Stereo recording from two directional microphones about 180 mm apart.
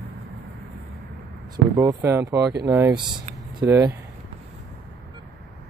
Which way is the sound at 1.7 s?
15° right (ahead or behind).